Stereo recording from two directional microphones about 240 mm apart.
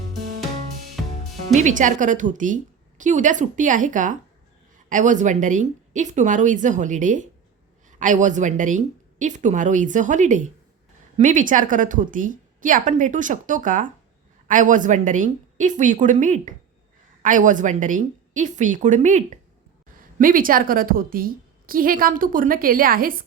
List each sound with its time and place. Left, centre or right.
1.5 s a woman's voice: right